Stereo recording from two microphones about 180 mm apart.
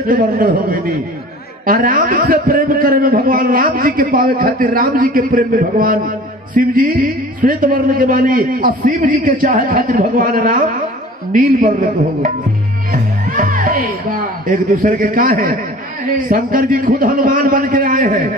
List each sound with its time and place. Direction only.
0.1 s a man's voice: 55° right (ahead or behind)